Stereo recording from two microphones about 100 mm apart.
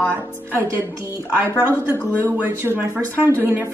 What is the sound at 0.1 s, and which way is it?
Speech, 25° right (ahead or behind).